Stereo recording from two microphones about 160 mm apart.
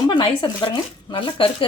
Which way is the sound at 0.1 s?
30° left (ahead or behind).